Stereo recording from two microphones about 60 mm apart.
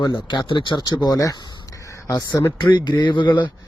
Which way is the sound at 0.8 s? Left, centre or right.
Left.